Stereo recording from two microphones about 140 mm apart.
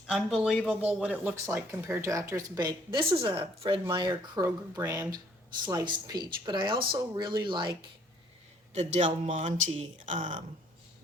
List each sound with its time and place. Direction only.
0.1 s speech: 5° right (ahead or behind); by 4.2 s 35° right (ahead or behind)
4.4 s speech: 20° right (ahead or behind)
8.7 s a man's voice: 55° right (ahead or behind)